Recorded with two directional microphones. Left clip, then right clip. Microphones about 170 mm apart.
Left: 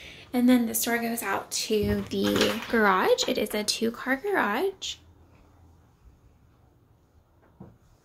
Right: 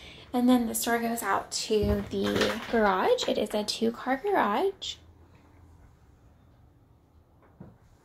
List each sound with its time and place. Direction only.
0.0 s a woman's voice: 20° left (ahead or behind)
1.9 s speech: 35° left (ahead or behind); by 4.9 s 15° left (ahead or behind)